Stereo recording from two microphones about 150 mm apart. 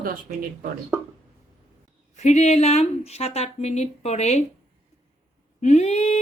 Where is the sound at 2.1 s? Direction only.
50° left (ahead or behind).